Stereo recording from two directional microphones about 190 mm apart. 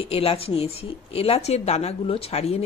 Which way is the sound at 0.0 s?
30° left (ahead or behind).